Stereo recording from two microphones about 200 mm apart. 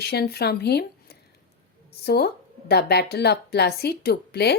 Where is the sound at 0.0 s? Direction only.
50° left (ahead or behind).